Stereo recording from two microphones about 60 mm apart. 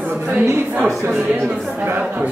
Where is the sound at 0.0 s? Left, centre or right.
Right.